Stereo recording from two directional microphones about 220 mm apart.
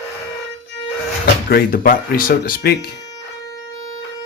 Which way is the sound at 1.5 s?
40° left (ahead or behind).